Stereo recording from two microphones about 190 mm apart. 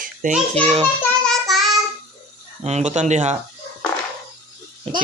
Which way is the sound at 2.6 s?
35° right (ahead or behind).